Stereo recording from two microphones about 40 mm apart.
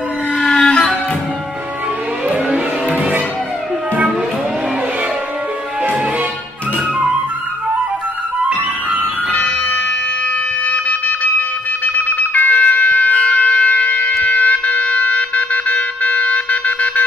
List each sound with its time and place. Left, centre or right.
0.6 s music: left
9.3 s music: left
10.7 s a sound: left
11.8 s siren: left
14.2 s wind instrument: left